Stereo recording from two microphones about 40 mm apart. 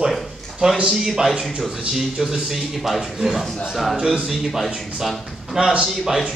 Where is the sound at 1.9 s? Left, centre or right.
Centre.